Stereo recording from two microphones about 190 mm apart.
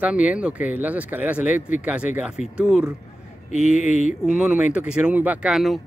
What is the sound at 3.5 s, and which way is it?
Speech, 40° left (ahead or behind).